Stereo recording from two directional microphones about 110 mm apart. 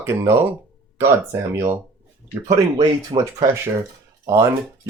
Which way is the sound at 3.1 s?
35° right (ahead or behind).